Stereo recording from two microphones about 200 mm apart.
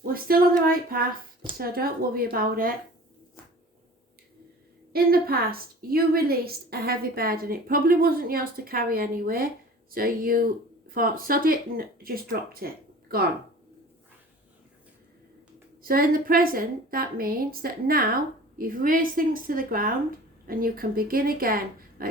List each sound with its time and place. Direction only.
0.0 s a woman's voice: 45° right (ahead or behind)
4.9 s a woman's voice: 50° right (ahead or behind)
15.8 s a woman's voice: 45° right (ahead or behind)